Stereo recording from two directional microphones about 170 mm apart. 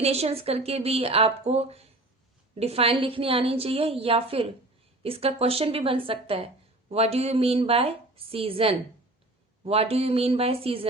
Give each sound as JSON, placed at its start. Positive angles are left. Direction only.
{"t": 0.0, "sound": "speech", "side_deg": -35}